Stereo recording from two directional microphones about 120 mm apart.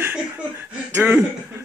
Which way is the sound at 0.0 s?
15° right (ahead or behind).